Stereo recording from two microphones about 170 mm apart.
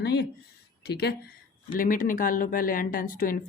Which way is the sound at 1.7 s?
55° left (ahead or behind).